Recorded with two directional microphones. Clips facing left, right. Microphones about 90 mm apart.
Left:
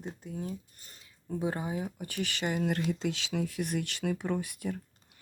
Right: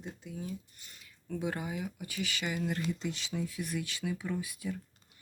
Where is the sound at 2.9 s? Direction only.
80° left.